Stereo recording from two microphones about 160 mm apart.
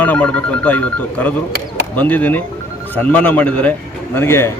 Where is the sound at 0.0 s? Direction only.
10° left (ahead or behind).